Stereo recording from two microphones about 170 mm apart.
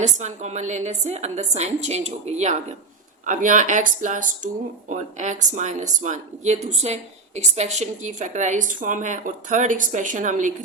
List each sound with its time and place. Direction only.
0.0 s a woman's voice: 40° right (ahead or behind)